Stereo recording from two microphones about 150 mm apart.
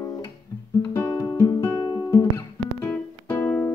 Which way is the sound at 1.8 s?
25° left (ahead or behind).